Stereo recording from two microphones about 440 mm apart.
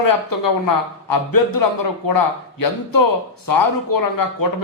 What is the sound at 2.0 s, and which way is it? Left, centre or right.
A man's voice, left.